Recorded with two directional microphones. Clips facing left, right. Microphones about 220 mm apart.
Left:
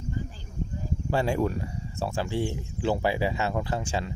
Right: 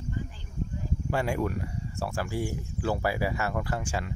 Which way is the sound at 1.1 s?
30° left (ahead or behind).